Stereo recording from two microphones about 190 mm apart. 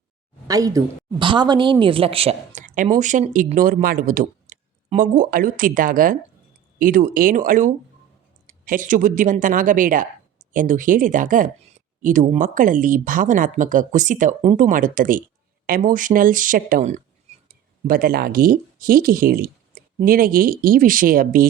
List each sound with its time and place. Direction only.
0.4 s a woman's voice: 20° right (ahead or behind)
2.6 s a sound: 40° right (ahead or behind)
3.0 s speech: 40° right (ahead or behind)